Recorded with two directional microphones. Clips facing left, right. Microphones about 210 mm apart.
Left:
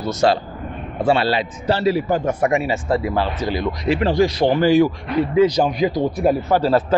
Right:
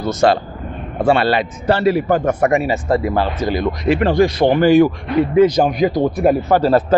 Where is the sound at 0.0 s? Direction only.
50° right (ahead or behind).